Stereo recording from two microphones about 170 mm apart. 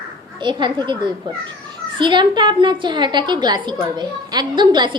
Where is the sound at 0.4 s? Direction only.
25° right (ahead or behind).